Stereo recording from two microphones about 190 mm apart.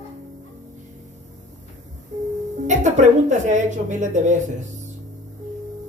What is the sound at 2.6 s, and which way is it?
A woman's voice, 40° right (ahead or behind).